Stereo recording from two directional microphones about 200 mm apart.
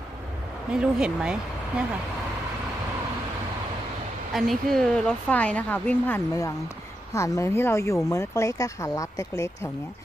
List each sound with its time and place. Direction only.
0.7 s speech: 5° right (ahead or behind)
4.3 s speech: centre (ahead or behind)